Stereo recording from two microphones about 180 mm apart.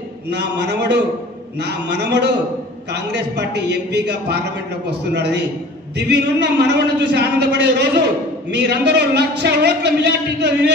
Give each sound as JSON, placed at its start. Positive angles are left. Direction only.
{"t": 0.3, "sound": "a man's voice", "side_deg": -70}